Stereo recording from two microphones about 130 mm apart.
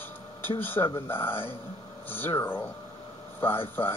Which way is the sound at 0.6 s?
15° left (ahead or behind).